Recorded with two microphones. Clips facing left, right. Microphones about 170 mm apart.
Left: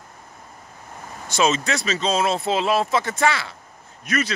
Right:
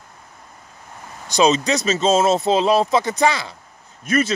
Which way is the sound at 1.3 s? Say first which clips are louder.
Right 4 dB; 35° right (ahead or behind).